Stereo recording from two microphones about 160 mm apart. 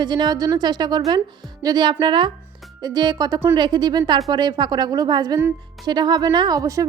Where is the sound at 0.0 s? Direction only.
25° right (ahead or behind).